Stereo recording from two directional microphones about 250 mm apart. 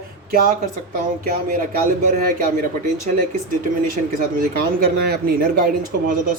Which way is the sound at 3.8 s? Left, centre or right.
Right.